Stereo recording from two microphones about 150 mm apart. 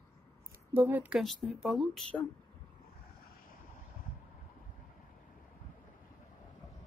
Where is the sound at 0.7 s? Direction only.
10° right (ahead or behind).